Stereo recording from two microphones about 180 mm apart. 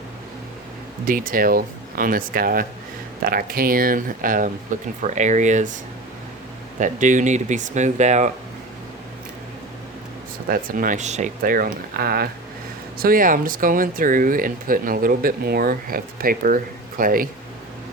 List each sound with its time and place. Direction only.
1.0 s speech: 50° right (ahead or behind)
6.7 s speech: 45° right (ahead or behind)
10.5 s speech: 50° right (ahead or behind)